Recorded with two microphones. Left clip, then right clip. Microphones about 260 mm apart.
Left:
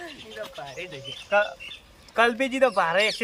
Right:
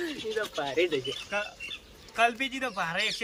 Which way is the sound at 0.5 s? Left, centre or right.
Right.